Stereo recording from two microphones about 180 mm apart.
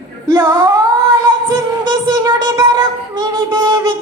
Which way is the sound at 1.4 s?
25° right (ahead or behind).